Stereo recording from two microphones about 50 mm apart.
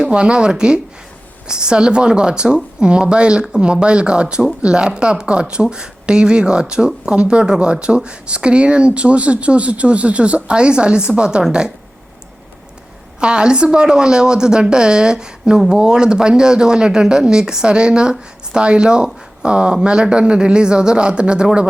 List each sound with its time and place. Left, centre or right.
0.1 s speech: right
13.1 s speech: centre